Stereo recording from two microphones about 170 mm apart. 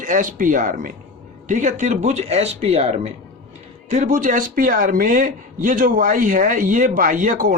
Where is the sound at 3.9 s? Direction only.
50° right (ahead or behind).